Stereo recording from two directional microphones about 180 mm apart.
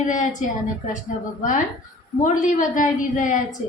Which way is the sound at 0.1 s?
45° left (ahead or behind).